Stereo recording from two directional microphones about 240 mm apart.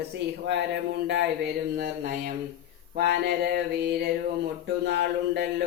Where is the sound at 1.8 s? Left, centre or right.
Right.